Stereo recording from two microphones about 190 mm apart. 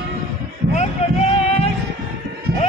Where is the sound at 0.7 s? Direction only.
35° left (ahead or behind).